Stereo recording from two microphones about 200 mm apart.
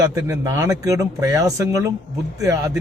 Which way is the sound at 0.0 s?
15° right (ahead or behind).